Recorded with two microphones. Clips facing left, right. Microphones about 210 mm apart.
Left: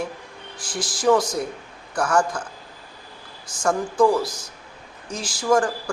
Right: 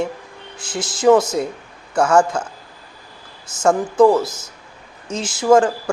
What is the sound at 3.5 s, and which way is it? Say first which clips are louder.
Speech: right 6 dB; 25° right (ahead or behind).